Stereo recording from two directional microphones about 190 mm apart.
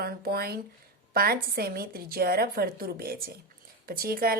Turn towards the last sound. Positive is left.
turn(degrees=-50)  # may be behind; listen again after turning